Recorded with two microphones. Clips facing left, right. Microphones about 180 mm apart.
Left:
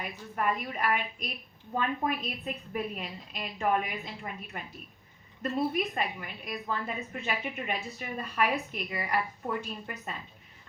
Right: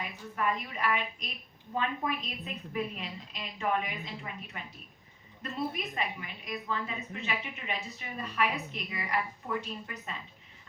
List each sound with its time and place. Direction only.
0.0 s a woman's voice: 50° left (ahead or behind)